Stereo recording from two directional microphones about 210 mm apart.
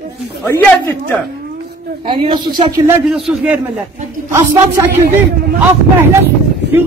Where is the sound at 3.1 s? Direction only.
5° right (ahead or behind).